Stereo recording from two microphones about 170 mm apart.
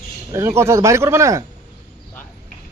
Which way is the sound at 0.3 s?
15° right (ahead or behind).